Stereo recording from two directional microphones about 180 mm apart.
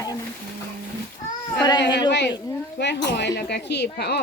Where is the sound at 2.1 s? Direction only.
75° left (ahead or behind).